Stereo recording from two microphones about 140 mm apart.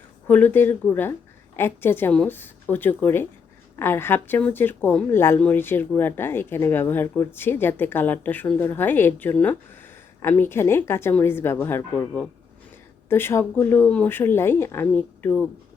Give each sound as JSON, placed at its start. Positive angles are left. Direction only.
{"t": 0.3, "sound": "speech", "side_deg": 15}